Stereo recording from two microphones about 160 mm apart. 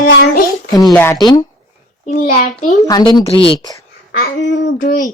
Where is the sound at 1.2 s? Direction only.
25° left (ahead or behind).